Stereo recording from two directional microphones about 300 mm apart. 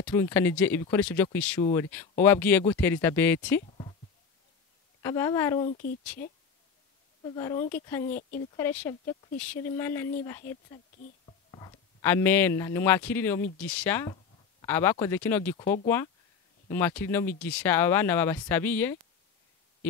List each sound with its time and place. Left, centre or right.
0.0 s speech: centre
3.6 s a sound: centre
5.0 s speech: centre
5.7 s speech: left
7.2 s speech: centre
8.1 s speech: left
8.5 s speech: centre
10.4 s speech: left
11.2 s speech: centre